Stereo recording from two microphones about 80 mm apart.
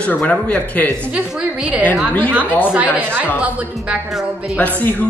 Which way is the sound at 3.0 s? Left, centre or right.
Right.